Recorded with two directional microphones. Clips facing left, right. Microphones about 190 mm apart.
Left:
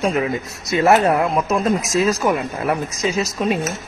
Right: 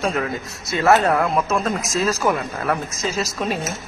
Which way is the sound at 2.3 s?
25° left (ahead or behind).